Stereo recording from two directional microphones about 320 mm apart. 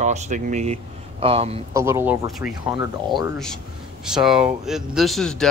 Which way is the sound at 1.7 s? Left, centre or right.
Centre.